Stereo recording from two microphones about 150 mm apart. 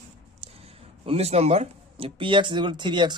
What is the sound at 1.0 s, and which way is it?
Speech, 45° right (ahead or behind).